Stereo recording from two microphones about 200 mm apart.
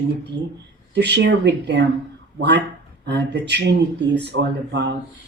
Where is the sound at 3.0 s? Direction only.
60° right (ahead or behind).